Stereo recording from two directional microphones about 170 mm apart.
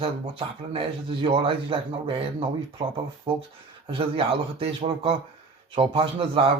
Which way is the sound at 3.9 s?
30° right (ahead or behind).